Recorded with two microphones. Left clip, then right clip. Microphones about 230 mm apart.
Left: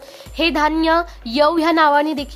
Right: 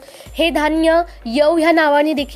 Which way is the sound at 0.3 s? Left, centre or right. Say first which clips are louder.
Right 1 dB; centre.